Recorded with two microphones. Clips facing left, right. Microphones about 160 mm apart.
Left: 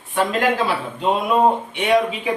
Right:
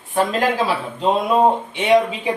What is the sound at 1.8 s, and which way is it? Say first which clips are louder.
Speech: right 5 dB; 25° right (ahead or behind).